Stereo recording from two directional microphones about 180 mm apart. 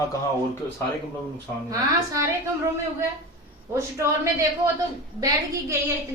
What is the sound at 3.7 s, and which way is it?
A woman's voice, 15° right (ahead or behind).